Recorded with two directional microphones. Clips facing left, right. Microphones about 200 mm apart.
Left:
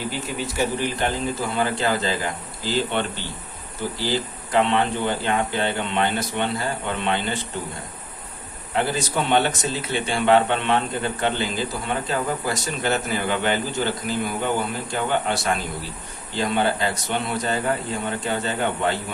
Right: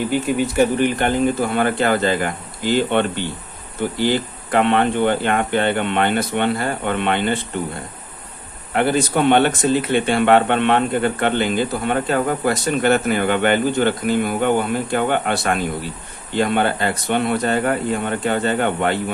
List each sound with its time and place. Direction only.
0.3 s speech: 60° right (ahead or behind)
8.7 s speech: 60° right (ahead or behind)